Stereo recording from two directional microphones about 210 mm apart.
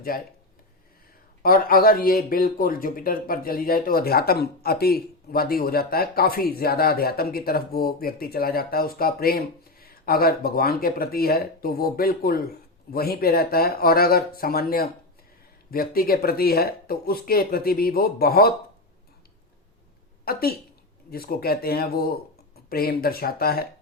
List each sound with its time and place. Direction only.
1.4 s speech: 45° left (ahead or behind)
20.2 s speech: 45° left (ahead or behind)